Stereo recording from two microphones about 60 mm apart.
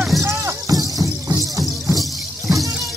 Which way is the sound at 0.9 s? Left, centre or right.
Right.